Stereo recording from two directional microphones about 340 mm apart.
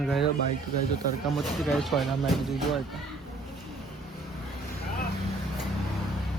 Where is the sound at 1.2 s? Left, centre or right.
Centre.